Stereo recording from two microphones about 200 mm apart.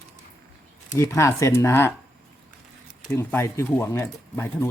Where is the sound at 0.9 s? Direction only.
15° left (ahead or behind).